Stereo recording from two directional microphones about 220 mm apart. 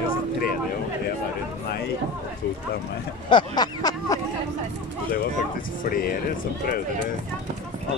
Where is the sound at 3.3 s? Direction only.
20° left (ahead or behind).